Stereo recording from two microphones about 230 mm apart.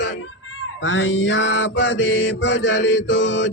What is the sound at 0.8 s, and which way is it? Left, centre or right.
Mantra, left.